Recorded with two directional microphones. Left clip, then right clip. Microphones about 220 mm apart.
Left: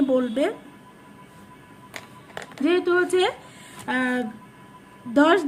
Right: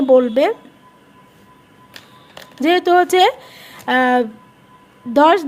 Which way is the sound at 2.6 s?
45° right (ahead or behind).